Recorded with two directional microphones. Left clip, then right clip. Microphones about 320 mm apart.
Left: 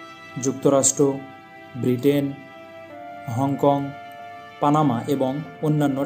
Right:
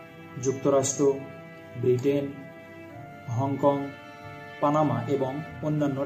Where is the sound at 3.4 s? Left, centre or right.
Left.